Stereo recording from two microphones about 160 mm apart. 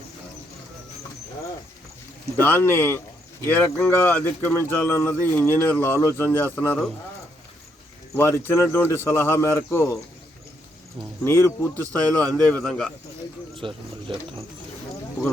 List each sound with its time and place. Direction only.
2.4 s speech: 15° left (ahead or behind)
8.1 s speech: 15° left (ahead or behind)
11.2 s speech: 15° left (ahead or behind)
13.6 s speech: 30° right (ahead or behind)